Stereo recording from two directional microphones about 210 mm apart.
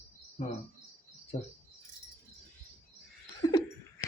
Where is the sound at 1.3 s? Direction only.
25° left (ahead or behind).